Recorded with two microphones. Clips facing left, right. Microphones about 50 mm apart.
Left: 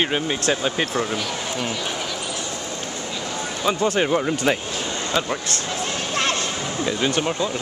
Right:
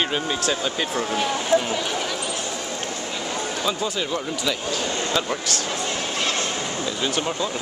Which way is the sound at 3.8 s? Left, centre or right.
Left.